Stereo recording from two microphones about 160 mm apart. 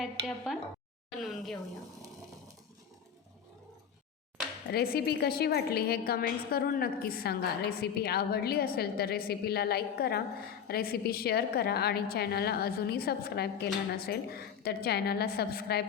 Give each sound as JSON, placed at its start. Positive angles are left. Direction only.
{"t": 1.2, "sound": "speech", "side_deg": 0}
{"t": 4.7, "sound": "a woman's voice", "side_deg": 80}